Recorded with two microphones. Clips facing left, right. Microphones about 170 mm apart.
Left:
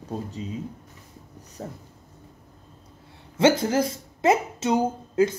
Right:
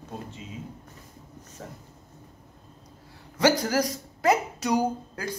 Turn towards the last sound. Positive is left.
turn(degrees=20)  # may be behind; listen again after turning